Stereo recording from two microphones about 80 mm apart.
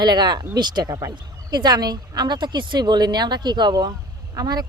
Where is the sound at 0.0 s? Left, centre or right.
Right.